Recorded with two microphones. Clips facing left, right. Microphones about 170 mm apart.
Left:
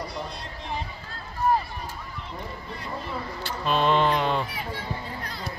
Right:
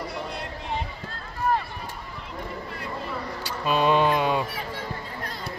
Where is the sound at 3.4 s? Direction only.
10° right (ahead or behind).